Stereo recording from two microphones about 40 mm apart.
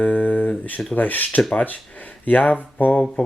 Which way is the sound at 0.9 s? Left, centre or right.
Left.